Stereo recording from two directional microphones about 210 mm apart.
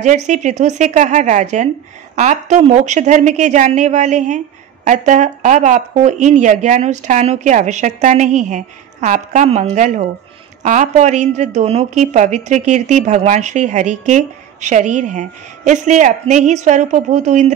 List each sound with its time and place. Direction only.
0.0 s a woman's voice: 35° right (ahead or behind)